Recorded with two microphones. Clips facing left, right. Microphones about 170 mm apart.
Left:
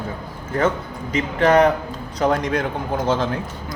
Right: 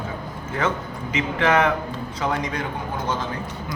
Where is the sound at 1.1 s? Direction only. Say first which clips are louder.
Left 4 dB; 35° left (ahead or behind).